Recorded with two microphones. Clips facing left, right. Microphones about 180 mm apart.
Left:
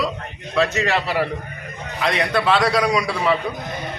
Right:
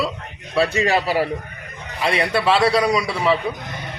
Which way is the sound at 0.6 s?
35° right (ahead or behind).